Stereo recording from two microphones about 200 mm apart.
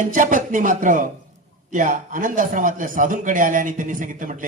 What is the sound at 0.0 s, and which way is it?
Speech, 40° right (ahead or behind).